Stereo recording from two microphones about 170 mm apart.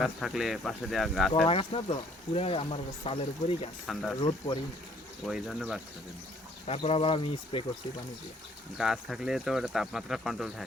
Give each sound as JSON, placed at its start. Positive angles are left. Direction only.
{"t": 0.0, "sound": "speech", "side_deg": 0}
{"t": 1.5, "sound": "speech", "side_deg": 35}
{"t": 5.2, "sound": "speech", "side_deg": 0}
{"t": 6.7, "sound": "speech", "side_deg": 35}
{"t": 8.8, "sound": "speech", "side_deg": 0}